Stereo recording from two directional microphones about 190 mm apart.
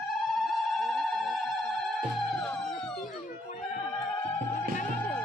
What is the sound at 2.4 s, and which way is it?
Music, centre (ahead or behind).